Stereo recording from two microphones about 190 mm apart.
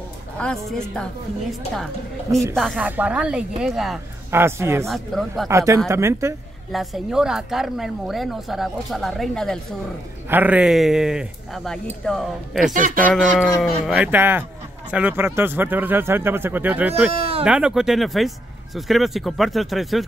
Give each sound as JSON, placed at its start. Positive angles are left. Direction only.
{"t": 0.4, "sound": "a woman's voice", "side_deg": 5}
{"t": 2.5, "sound": "a woman's voice", "side_deg": 0}
{"t": 4.3, "sound": "speech", "side_deg": -15}
{"t": 4.8, "sound": "a woman's voice", "side_deg": 0}
{"t": 5.5, "sound": "speech", "side_deg": -15}
{"t": 6.7, "sound": "a woman's voice", "side_deg": 0}
{"t": 10.3, "sound": "a woman's voice", "side_deg": -10}